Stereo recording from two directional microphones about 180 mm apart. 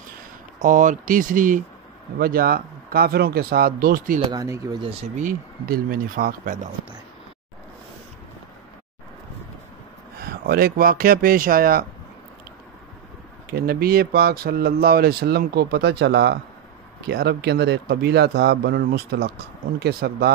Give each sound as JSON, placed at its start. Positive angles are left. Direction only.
{"t": 0.6, "sound": "speech", "side_deg": -45}
{"t": 4.3, "sound": "speech", "side_deg": -20}
{"t": 4.8, "sound": "speech", "side_deg": -45}
{"t": 10.2, "sound": "speech", "side_deg": -55}
{"t": 13.5, "sound": "speech", "side_deg": -60}